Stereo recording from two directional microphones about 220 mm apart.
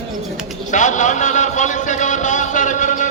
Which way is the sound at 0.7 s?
35° left (ahead or behind).